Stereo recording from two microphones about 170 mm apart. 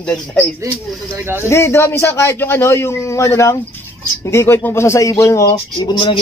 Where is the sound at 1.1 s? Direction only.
15° right (ahead or behind).